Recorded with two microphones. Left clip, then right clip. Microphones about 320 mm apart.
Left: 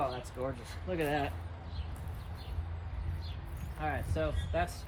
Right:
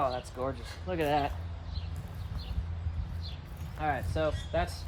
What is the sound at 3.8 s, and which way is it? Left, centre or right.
Speech, centre.